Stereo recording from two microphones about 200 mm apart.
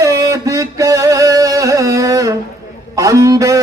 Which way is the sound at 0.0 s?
15° right (ahead or behind).